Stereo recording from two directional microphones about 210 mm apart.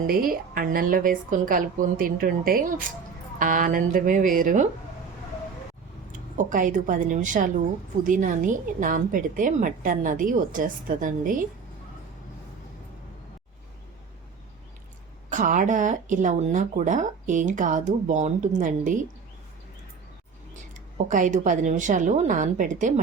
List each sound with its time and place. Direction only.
0.0 s speech: 45° right (ahead or behind)
6.1 s speech: 40° right (ahead or behind)
15.3 s speech: 35° right (ahead or behind)
21.1 s speech: 35° right (ahead or behind)